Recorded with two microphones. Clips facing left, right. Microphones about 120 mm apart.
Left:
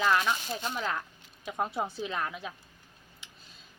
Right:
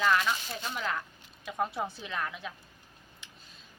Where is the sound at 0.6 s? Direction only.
25° left (ahead or behind).